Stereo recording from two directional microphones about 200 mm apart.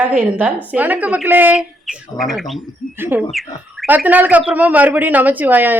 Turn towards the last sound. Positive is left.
turn(degrees=-10)  # may be behind; listen again after turning